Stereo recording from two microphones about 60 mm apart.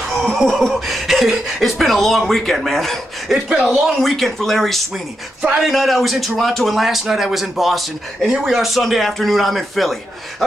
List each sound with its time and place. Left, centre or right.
0.1 s neigh: centre
0.4 s speech: centre